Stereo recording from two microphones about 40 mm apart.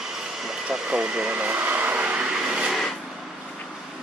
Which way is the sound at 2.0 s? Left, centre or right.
Right.